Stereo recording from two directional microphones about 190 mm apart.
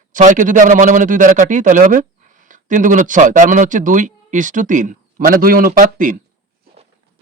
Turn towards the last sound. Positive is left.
turn(degrees=-45)  # may be behind; listen again after turning